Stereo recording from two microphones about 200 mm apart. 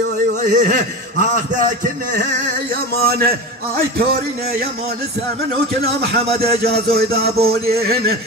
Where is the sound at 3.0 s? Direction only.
50° right (ahead or behind).